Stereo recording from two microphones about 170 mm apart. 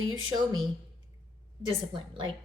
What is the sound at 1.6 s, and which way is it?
Speech, 30° right (ahead or behind).